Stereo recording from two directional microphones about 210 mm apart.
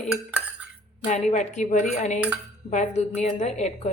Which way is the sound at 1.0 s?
35° left (ahead or behind).